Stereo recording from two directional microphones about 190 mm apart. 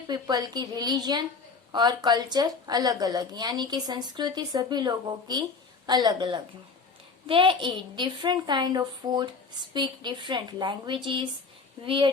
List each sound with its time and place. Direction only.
0.1 s a woman's voice: 20° right (ahead or behind)